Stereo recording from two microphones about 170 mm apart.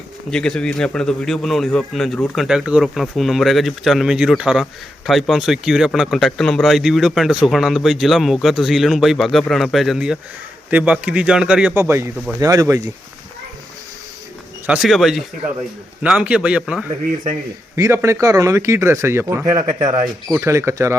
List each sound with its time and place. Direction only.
0.3 s speech: 5° left (ahead or behind); by 12.9 s 20° right (ahead or behind)
14.7 s speech: centre (ahead or behind)
17.7 s speech: 15° right (ahead or behind)